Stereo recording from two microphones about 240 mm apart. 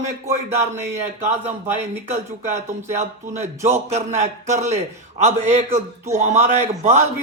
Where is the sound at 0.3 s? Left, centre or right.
Right.